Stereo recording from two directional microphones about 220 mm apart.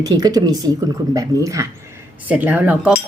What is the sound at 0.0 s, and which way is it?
Speech, 15° right (ahead or behind).